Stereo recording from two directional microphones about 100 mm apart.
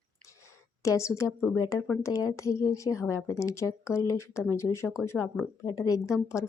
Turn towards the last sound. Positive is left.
turn(degrees=30)  # may be behind; listen again after turning